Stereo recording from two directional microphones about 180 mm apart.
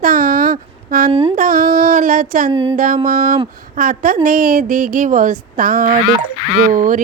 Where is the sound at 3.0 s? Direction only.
50° right (ahead or behind).